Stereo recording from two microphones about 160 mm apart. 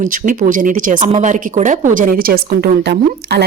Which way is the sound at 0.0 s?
55° right (ahead or behind).